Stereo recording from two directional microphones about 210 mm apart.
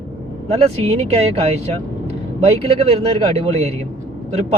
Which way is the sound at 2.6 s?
30° right (ahead or behind).